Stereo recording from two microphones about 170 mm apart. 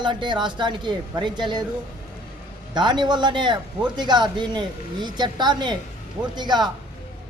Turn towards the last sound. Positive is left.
turn(degrees=-25)  # may be behind; listen again after turning